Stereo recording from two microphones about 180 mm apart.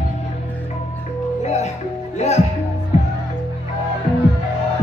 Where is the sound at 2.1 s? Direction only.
40° left (ahead or behind).